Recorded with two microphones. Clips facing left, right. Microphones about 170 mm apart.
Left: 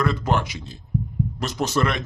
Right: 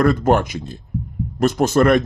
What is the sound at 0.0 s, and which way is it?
Speech, 50° right (ahead or behind).